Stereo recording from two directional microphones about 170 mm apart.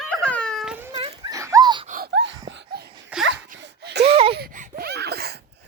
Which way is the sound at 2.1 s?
90° right.